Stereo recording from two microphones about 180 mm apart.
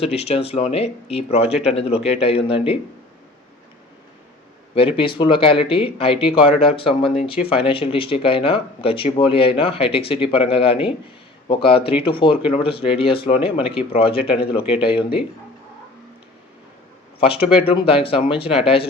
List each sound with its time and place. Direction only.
0.0 s speech: 35° left (ahead or behind)
4.7 s speech: 30° left (ahead or behind)
17.2 s speech: 30° left (ahead or behind)